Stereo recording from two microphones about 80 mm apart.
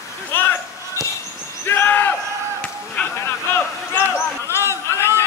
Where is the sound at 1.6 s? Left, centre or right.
Left.